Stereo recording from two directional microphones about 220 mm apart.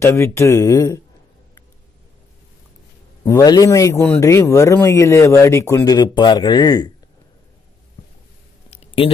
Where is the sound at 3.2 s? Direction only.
15° left (ahead or behind).